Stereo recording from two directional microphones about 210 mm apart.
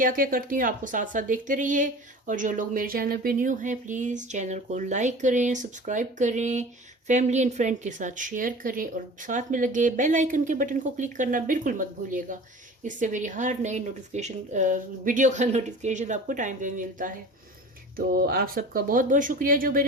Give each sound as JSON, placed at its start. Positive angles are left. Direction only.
{"t": 0.0, "sound": "speech", "side_deg": -40}